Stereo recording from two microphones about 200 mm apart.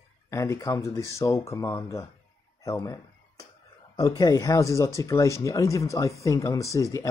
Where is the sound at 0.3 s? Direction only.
15° left (ahead or behind).